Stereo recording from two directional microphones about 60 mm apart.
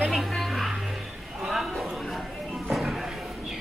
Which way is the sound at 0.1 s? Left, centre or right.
Centre.